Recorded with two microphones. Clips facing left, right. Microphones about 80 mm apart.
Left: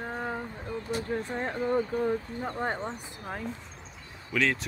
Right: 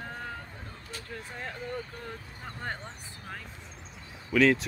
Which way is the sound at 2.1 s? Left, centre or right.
Left.